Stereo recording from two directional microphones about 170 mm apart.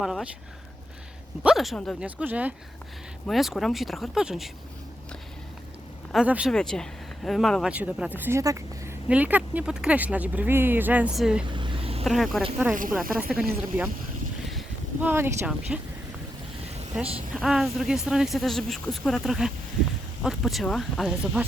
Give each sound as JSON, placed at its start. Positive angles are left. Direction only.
{"t": 0.0, "sound": "speech", "side_deg": 0}
{"t": 1.5, "sound": "speech", "side_deg": 0}
{"t": 6.1, "sound": "speech", "side_deg": -5}
{"t": 6.5, "sound": "speech", "side_deg": 5}
{"t": 11.5, "sound": "vehicle", "side_deg": -30}
{"t": 12.0, "sound": "speech", "side_deg": 0}
{"t": 15.0, "sound": "speech", "side_deg": -15}
{"t": 17.3, "sound": "speech", "side_deg": 0}